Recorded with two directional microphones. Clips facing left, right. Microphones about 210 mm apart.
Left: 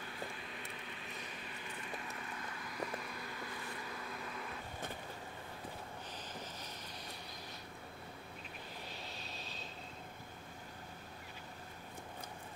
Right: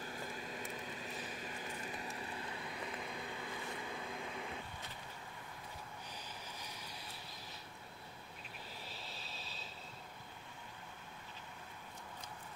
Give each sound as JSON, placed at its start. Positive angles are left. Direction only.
{"t": 0.5, "sound": "a sound", "side_deg": -40}
{"t": 2.0, "sound": "vehicle", "side_deg": -30}
{"t": 8.9, "sound": "vehicle", "side_deg": 0}